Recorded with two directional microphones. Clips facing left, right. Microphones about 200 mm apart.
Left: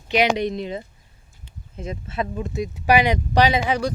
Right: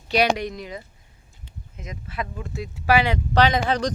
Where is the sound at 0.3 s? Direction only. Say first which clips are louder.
Left 6 dB; 25° left (ahead or behind).